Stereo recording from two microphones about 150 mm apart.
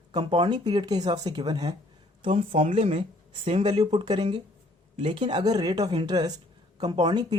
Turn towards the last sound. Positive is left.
turn(degrees=-30)  # may be behind; listen again after turning